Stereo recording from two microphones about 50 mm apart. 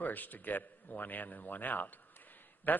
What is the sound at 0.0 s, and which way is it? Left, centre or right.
A man's voice, left.